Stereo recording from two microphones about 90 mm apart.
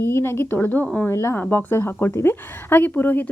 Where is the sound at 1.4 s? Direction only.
20° left (ahead or behind).